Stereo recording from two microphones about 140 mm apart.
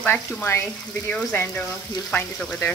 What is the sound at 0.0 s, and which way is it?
Speech, 10° left (ahead or behind).